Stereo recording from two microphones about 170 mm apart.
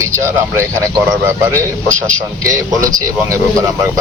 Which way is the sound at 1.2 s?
15° right (ahead or behind).